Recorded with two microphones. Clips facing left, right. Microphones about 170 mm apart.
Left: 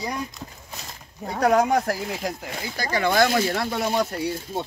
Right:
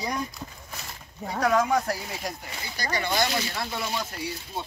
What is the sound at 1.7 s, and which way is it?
Speech, 55° left (ahead or behind).